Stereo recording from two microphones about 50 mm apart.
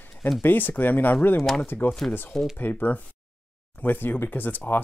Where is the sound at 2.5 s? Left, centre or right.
Left.